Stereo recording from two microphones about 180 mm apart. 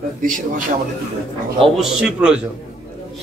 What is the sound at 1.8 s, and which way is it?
Speech, 5° right (ahead or behind).